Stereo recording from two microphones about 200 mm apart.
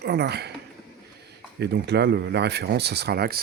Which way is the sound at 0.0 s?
55° right (ahead or behind).